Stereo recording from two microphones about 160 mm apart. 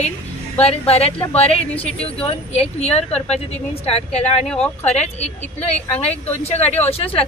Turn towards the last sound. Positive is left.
turn(degrees=35)  # may be behind; listen again after turning